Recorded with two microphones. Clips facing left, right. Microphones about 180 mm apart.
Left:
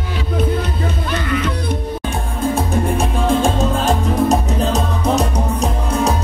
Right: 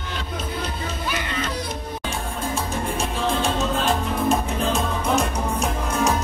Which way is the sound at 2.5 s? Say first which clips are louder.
Left 7 dB; 55° left (ahead or behind).